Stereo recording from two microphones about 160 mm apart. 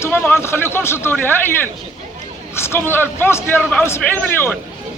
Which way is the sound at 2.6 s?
15° left (ahead or behind).